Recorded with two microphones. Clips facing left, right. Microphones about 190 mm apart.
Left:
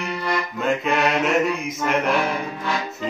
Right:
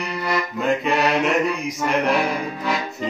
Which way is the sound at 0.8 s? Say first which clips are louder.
Even; centre (ahead or behind).